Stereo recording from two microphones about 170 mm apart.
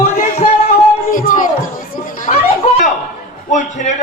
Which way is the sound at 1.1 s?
55° left (ahead or behind).